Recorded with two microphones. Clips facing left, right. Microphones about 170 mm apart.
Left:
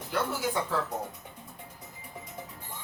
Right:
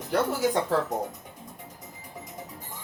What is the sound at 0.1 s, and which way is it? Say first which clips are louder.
Speech: right 6 dB; 40° right (ahead or behind).